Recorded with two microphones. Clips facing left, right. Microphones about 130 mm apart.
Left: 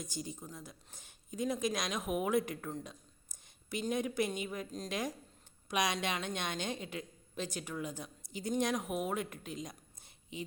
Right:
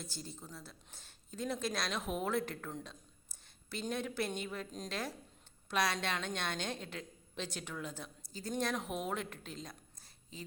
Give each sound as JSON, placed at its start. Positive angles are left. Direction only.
{"t": 0.0, "sound": "a woman's voice", "side_deg": 15}
{"t": 4.9, "sound": "a woman's voice", "side_deg": 15}